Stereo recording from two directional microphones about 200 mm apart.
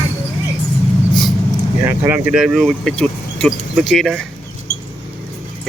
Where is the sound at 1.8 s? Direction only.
10° right (ahead or behind).